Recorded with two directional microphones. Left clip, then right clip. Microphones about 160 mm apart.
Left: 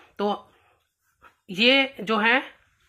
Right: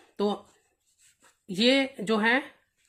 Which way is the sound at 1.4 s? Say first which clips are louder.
Left 5 dB; 35° right (ahead or behind).